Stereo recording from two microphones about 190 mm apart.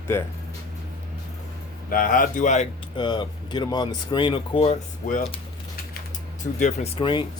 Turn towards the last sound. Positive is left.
turn(degrees=25)  # may be behind; listen again after turning